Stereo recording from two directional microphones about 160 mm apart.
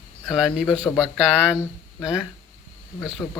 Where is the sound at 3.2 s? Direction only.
15° left (ahead or behind).